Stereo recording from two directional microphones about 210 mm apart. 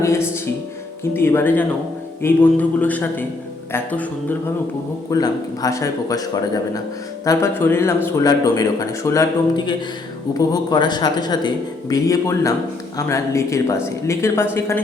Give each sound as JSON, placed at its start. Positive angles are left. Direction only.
{"t": 0.0, "sound": "music", "side_deg": 10}
{"t": 1.1, "sound": "a man's voice", "side_deg": 10}